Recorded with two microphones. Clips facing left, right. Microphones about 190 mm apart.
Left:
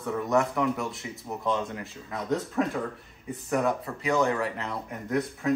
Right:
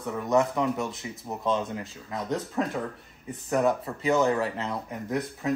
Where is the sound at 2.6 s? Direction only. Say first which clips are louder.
Left 1 dB; 10° right (ahead or behind).